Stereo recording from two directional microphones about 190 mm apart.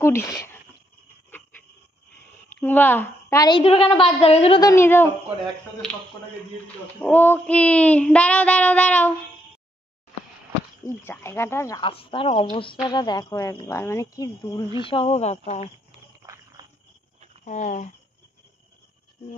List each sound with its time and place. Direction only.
0.0 s speech: 15° left (ahead or behind)
2.5 s a woman's voice: 10° left (ahead or behind); by 4.6 s 30° left (ahead or behind)
4.6 s child singing: 15° left (ahead or behind)
7.0 s child singing: 10° left (ahead or behind)
11.1 s child singing: 15° left (ahead or behind)
11.9 s a woman's voice: 30° left (ahead or behind)
16.2 s cricket: 20° right (ahead or behind)
17.5 s speech: 40° left (ahead or behind)